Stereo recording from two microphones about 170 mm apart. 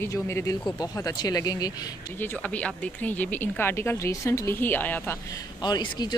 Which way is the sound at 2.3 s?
10° left (ahead or behind).